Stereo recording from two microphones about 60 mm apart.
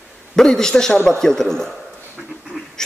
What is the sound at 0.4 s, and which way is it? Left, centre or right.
A man's voice, centre.